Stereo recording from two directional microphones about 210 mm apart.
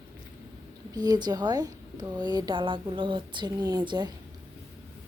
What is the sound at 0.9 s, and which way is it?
A woman's voice, 20° right (ahead or behind).